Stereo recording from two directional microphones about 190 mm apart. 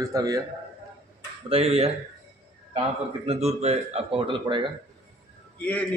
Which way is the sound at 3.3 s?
35° right (ahead or behind).